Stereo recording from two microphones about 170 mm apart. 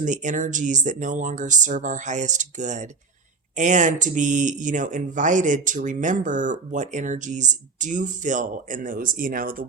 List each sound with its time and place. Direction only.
0.0 s speech: 45° right (ahead or behind)